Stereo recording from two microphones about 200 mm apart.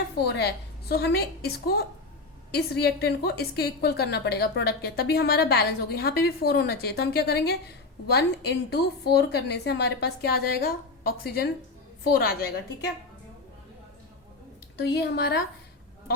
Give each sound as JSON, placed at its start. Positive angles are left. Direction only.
{"t": 0.2, "sound": "a woman's voice", "side_deg": 55}
{"t": 14.8, "sound": "a woman's voice", "side_deg": 55}